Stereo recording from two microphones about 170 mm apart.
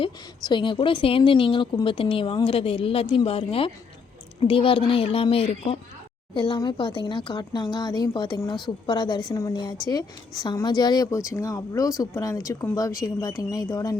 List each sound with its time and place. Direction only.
0.0 s a woman's voice: 30° left (ahead or behind)